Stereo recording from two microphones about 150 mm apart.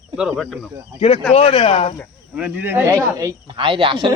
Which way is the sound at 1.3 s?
40° left (ahead or behind).